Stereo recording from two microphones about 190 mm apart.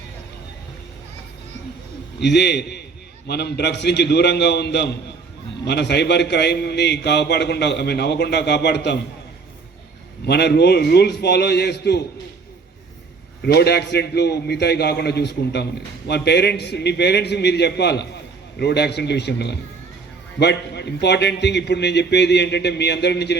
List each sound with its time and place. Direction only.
2.2 s a man's voice: 65° left (ahead or behind)
10.2 s a man's voice: 60° left (ahead or behind)
13.4 s a man's voice: 60° left (ahead or behind)